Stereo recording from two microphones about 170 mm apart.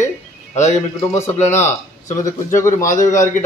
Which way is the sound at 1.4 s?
45° left (ahead or behind).